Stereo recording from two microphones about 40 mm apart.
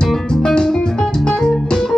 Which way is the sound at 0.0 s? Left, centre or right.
Centre.